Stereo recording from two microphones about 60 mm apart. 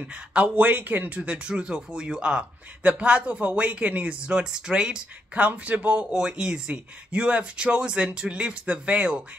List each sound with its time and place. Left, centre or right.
0.0 s speech: right
1.2 s speech: centre
5.3 s speech: right
5.9 s speech: centre